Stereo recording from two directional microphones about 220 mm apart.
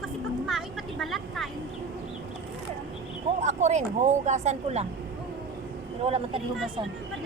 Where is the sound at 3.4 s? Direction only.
30° right (ahead or behind).